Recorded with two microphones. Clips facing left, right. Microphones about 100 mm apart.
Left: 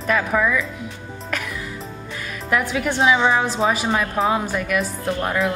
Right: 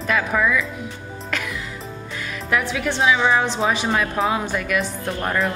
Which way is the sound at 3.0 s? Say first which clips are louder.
Left 2 dB; 25° left (ahead or behind).